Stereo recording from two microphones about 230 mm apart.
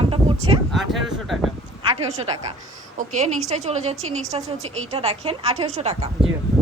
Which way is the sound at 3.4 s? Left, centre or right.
Right.